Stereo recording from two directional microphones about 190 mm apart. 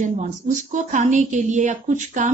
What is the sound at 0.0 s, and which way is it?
A woman's voice, 45° right (ahead or behind).